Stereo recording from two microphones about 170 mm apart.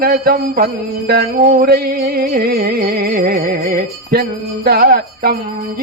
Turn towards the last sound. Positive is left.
turn(degrees=-60)  # may be behind; listen again after turning